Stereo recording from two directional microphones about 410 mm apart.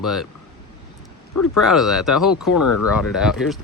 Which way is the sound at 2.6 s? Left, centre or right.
Left.